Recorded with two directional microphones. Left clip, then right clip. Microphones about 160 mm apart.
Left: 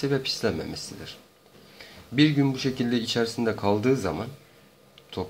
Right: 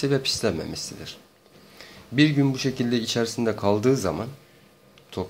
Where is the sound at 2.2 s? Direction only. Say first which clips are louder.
Right 1 dB; 15° right (ahead or behind).